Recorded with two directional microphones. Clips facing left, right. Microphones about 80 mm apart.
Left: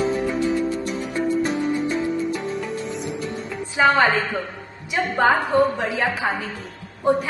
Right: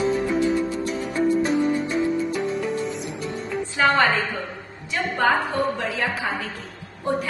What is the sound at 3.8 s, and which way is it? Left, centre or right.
A woman's voice, centre.